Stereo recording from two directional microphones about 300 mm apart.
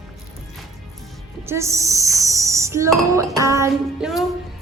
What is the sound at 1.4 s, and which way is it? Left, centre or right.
Speech, centre.